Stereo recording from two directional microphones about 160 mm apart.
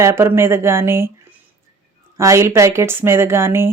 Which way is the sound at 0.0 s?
15° right (ahead or behind).